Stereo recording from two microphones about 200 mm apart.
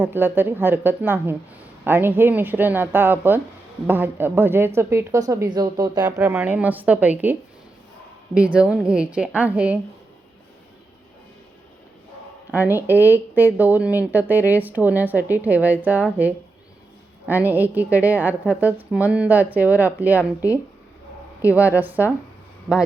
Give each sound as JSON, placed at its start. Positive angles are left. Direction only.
{"t": 0.0, "sound": "a woman's voice", "side_deg": -10}
{"t": 6.1, "sound": "a woman's voice", "side_deg": -10}
{"t": 8.4, "sound": "a woman's voice", "side_deg": -5}
{"t": 12.5, "sound": "a woman's voice", "side_deg": -10}
{"t": 17.2, "sound": "a woman's voice", "side_deg": -10}
{"t": 21.8, "sound": "a woman's voice", "side_deg": -10}